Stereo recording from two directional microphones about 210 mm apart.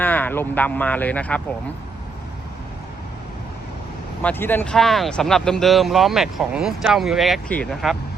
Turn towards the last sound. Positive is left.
turn(degrees=5)  # may be behind; listen again after turning